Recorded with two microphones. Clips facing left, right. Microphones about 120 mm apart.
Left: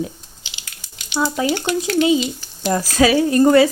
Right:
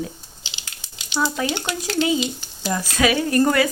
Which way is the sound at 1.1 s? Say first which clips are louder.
Left 3 dB; 20° left (ahead or behind).